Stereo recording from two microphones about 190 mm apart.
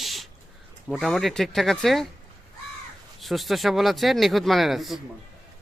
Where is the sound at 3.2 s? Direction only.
Centre (ahead or behind).